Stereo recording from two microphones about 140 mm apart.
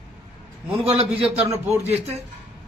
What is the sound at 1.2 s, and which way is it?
Speech, 10° right (ahead or behind).